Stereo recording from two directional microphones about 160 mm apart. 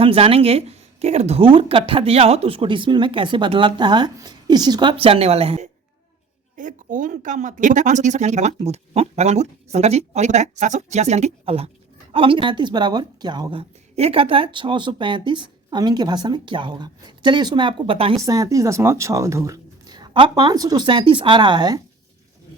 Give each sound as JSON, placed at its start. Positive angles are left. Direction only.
{"t": 0.0, "sound": "speech", "side_deg": -35}
{"t": 6.6, "sound": "speech", "side_deg": -55}
{"t": 18.2, "sound": "speech", "side_deg": -20}